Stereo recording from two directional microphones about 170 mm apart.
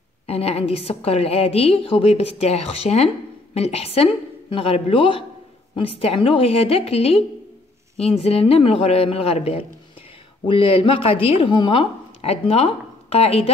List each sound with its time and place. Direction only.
0.3 s speech: 35° left (ahead or behind)